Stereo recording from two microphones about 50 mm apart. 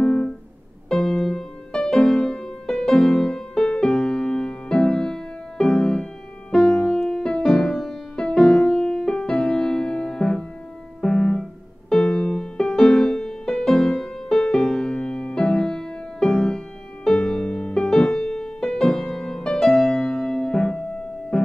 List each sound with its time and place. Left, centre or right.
0.0 s music: centre
7.1 s music: centre